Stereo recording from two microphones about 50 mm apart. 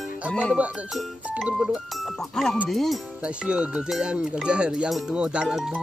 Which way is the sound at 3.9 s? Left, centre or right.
Centre.